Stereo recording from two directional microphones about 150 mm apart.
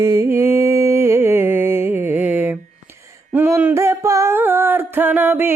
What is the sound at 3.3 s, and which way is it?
Music, 15° right (ahead or behind).